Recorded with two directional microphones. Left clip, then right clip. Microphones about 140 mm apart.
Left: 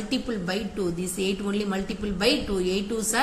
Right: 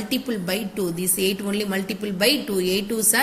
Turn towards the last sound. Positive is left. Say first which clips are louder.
# right 4 dB
turn(degrees=-20)  # may be behind; listen again after turning